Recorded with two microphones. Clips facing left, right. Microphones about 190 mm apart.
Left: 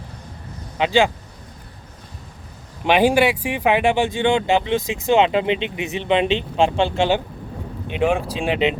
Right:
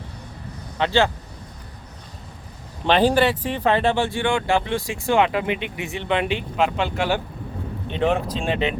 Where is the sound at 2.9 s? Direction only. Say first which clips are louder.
Left 2 dB; 10° left (ahead or behind).